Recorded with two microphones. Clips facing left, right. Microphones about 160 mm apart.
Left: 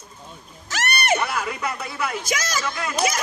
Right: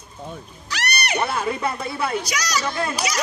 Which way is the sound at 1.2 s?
30° right (ahead or behind).